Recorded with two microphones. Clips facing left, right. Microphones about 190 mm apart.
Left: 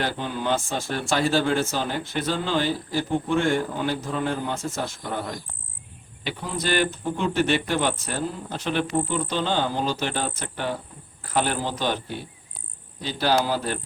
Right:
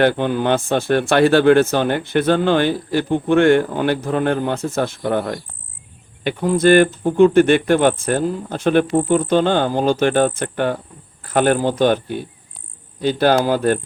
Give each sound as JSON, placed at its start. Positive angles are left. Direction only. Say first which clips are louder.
{"t": 0.0, "sound": "speech", "louder": "right 11 dB", "side_deg": -60}
{"t": 6.2, "sound": "speech", "louder": "right 14 dB", "side_deg": -50}